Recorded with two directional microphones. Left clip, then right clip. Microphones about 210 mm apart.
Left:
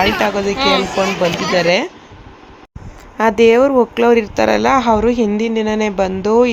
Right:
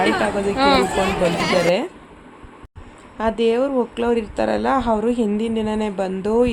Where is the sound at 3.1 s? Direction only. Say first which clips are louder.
Left 8 dB; 30° left (ahead or behind).